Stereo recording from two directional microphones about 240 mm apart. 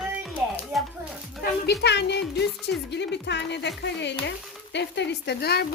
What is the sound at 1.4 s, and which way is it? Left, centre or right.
Speech, left.